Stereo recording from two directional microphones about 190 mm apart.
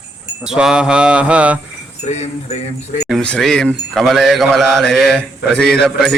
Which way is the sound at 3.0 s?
5° left (ahead or behind).